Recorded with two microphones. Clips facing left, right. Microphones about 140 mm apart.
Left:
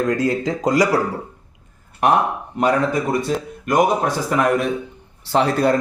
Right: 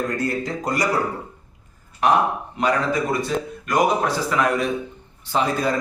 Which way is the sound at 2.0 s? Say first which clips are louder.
Left 2 dB; 55° left (ahead or behind).